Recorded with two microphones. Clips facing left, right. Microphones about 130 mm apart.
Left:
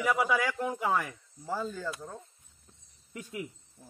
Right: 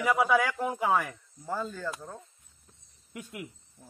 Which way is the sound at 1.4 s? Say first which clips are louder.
Even; 10° left (ahead or behind).